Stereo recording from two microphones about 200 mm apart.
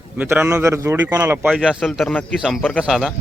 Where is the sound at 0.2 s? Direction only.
10° right (ahead or behind).